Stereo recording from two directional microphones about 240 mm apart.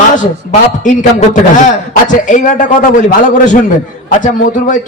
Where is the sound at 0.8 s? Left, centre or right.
Left.